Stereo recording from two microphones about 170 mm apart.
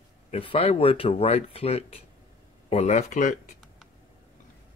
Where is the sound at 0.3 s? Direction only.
35° left (ahead or behind).